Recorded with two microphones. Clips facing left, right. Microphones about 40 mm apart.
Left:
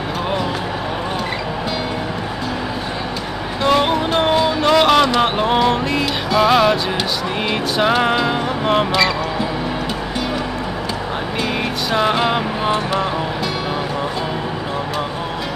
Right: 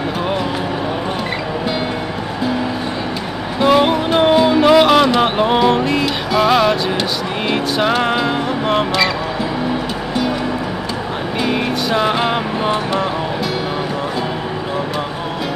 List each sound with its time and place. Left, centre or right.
3.6 s music: centre
11.4 s music: centre